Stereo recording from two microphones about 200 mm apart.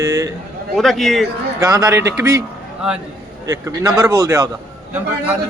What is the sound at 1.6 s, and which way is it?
A man's voice, 15° right (ahead or behind).